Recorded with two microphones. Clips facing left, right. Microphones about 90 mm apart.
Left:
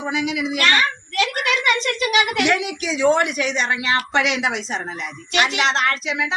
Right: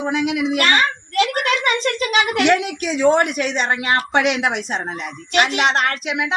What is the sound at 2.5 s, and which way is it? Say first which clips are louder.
A woman's voice: right 4 dB; 50° right (ahead or behind).